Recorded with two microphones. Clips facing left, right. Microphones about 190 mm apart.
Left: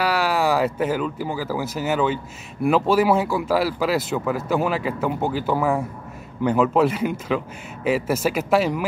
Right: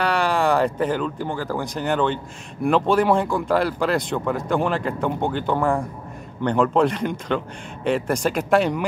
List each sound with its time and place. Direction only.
0.0 s speech: 5° left (ahead or behind)